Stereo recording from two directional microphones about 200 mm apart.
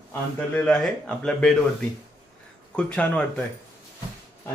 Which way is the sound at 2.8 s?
5° left (ahead or behind).